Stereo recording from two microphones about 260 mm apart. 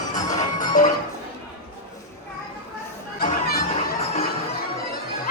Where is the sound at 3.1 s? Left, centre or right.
Left.